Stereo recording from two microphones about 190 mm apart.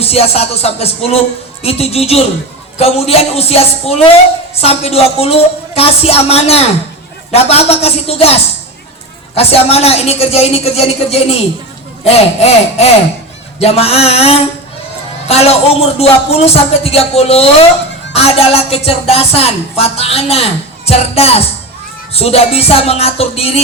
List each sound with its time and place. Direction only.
0.0 s speech: 30° left (ahead or behind)